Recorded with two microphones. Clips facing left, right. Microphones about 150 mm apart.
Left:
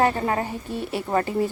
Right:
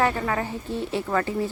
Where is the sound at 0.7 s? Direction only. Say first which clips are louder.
Right 2 dB; 10° left (ahead or behind).